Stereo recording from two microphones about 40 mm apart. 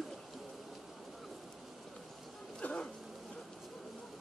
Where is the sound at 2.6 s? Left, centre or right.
Left.